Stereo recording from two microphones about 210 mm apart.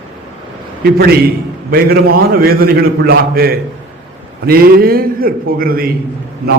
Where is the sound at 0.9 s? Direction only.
45° right (ahead or behind).